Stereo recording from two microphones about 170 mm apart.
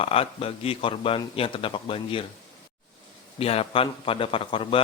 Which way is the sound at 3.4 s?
35° left (ahead or behind).